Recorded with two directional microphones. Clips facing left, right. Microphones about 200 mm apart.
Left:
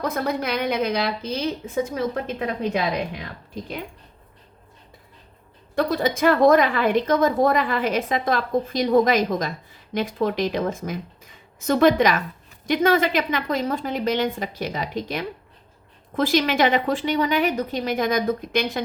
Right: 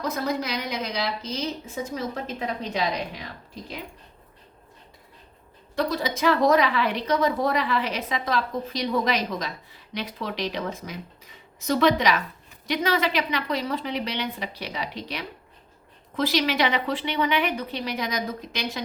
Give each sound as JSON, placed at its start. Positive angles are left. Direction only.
{"t": 0.0, "sound": "a woman's voice", "side_deg": 55}
{"t": 5.7, "sound": "a woman's voice", "side_deg": 50}